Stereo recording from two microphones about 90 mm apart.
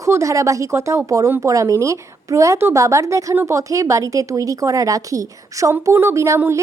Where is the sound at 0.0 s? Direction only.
35° right (ahead or behind).